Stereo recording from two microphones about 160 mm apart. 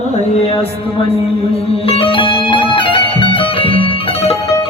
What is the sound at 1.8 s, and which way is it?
Music, 35° left (ahead or behind).